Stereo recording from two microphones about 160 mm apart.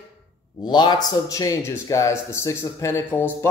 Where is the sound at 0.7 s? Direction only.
25° left (ahead or behind).